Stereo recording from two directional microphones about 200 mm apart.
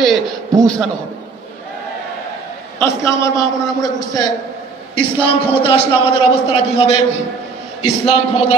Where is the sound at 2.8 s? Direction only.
15° left (ahead or behind).